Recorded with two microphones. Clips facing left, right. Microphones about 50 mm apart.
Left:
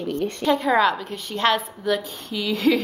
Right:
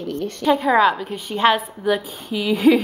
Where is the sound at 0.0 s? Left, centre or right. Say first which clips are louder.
Left 1 dB; left.